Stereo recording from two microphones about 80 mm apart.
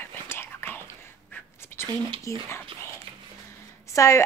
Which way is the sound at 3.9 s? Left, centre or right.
Left.